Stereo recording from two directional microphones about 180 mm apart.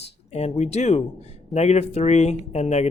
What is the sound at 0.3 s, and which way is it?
Speech, 35° left (ahead or behind).